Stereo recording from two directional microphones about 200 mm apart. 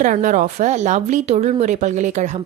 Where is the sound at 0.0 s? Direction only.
40° right (ahead or behind).